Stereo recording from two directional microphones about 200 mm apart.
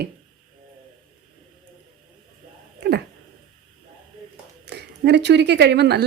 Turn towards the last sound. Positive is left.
turn(degrees=-55)  # may be behind; listen again after turning